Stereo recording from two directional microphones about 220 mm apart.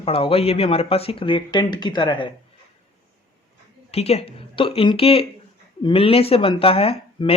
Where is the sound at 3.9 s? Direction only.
30° left (ahead or behind).